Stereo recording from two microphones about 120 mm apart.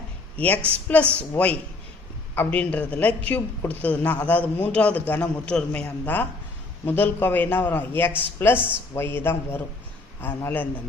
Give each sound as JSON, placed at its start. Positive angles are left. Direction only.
{"t": 0.3, "sound": "a man's voice", "side_deg": 10}